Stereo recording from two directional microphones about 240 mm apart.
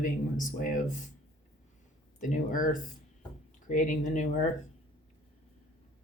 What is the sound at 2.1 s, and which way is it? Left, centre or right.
Speech, left.